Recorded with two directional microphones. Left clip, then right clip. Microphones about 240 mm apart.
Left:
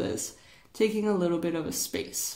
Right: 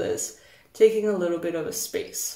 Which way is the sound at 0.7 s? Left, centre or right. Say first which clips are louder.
Right 7 dB; left.